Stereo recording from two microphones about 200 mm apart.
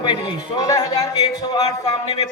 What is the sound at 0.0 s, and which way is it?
A man's voice, 20° left (ahead or behind).